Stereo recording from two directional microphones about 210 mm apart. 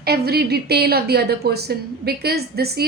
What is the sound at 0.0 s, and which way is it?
A woman's voice, 50° right (ahead or behind).